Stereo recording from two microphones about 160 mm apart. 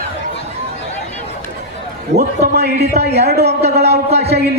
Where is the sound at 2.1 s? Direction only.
85° right.